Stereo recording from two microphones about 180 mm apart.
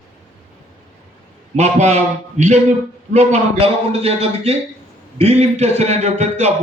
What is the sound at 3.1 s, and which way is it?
A man's voice, 40° right (ahead or behind).